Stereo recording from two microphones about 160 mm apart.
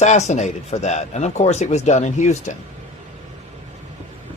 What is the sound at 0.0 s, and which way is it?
Speech, 45° left (ahead or behind).